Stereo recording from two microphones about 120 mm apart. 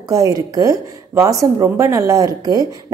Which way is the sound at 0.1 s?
30° right (ahead or behind).